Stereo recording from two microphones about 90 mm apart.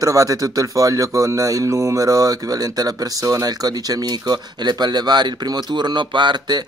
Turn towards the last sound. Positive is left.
turn(degrees=-50)  # may be behind; listen again after turning